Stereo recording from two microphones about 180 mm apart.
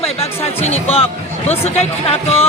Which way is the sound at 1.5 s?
35° left (ahead or behind).